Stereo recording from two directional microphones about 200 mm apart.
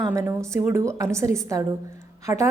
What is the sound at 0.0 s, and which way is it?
A woman's voice, 15° right (ahead or behind).